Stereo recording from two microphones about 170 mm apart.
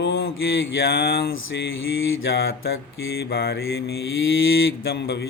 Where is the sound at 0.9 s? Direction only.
65° left (ahead or behind).